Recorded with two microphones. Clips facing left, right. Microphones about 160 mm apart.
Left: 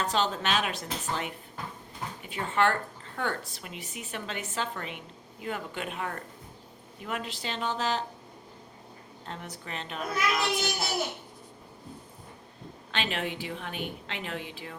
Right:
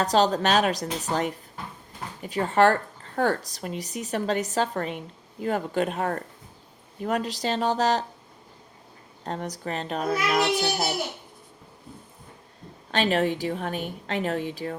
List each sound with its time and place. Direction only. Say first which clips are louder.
0.0 s speech: right 7 dB; 40° right (ahead or behind)
9.2 s speech: right 10 dB; 40° right (ahead or behind)
12.9 s speech: right 9 dB; 40° right (ahead or behind)